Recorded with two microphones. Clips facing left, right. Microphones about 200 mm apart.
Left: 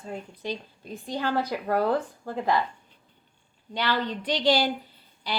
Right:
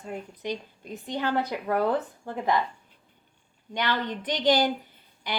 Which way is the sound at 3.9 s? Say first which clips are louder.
Left 3 dB; 15° right (ahead or behind).